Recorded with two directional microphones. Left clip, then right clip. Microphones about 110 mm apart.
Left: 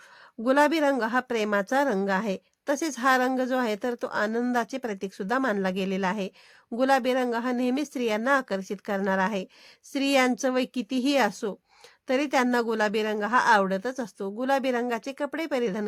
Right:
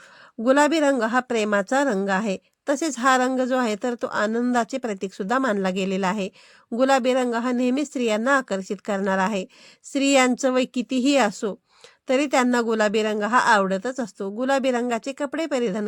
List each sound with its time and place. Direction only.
0.4 s a woman's voice: 30° right (ahead or behind)